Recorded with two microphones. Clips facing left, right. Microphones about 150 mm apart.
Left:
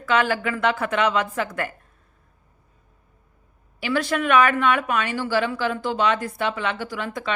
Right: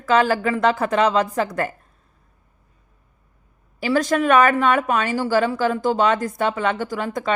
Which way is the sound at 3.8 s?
40° right (ahead or behind).